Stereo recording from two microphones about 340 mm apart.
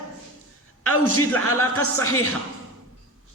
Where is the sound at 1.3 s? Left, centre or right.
Centre.